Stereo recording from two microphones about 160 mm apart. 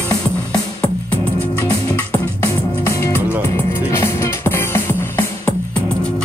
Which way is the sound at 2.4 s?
15° left (ahead or behind).